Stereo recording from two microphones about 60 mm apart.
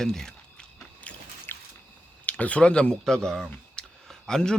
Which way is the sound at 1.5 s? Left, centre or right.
Left.